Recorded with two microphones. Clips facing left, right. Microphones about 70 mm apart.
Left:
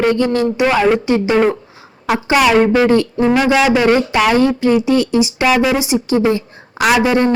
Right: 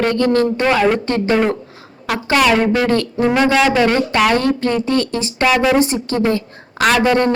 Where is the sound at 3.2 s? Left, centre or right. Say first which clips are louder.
Even; centre.